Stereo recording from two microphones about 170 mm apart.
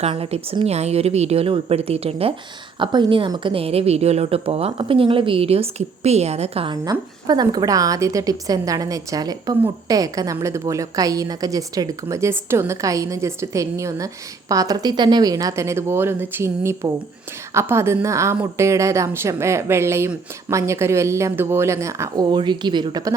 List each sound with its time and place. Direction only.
0.0 s a woman's voice: 35° right (ahead or behind)
7.3 s a woman's voice: 25° right (ahead or behind)